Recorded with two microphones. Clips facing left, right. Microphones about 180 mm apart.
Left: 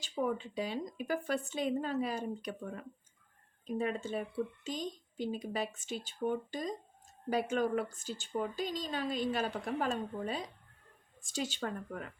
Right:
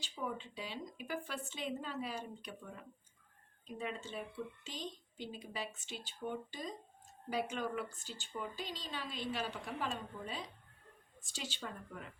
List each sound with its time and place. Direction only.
0.0 s speech: 45° left (ahead or behind)